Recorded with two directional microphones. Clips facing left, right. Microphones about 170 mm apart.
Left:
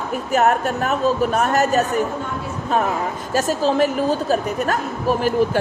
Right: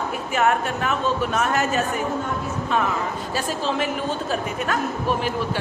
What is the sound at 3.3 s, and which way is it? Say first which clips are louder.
A woman's voice: left 8 dB; 40° left (ahead or behind).